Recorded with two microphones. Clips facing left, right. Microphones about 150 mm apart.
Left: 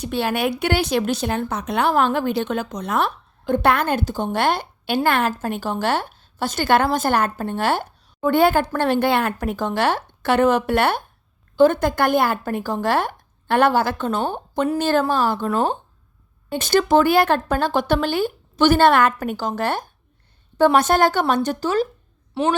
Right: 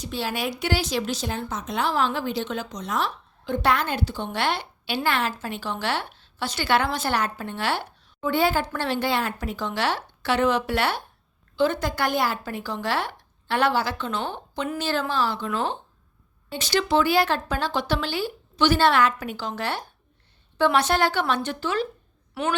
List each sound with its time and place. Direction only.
0.0 s a woman's voice: 60° left (ahead or behind); by 21.8 s 40° left (ahead or behind)
22.4 s a woman's voice: 30° left (ahead or behind)